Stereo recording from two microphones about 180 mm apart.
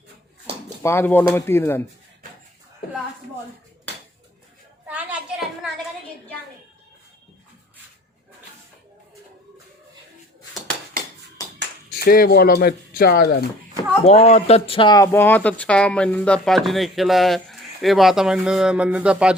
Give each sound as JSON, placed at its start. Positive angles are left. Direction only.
{"t": 0.8, "sound": "speech", "side_deg": 15}
{"t": 4.9, "sound": "a sound", "side_deg": -5}
{"t": 11.9, "sound": "speech", "side_deg": 55}
{"t": 14.0, "sound": "speech", "side_deg": 35}